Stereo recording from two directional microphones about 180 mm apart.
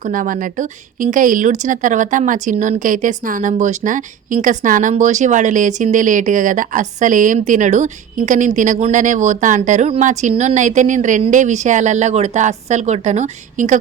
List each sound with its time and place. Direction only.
0.0 s a woman's voice: 45° right (ahead or behind)